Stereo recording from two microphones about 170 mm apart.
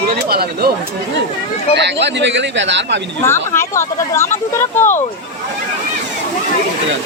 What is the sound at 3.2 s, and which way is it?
Speech, 15° left (ahead or behind).